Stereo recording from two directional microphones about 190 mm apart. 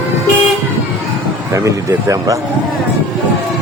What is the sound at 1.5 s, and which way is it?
Speech, 15° right (ahead or behind).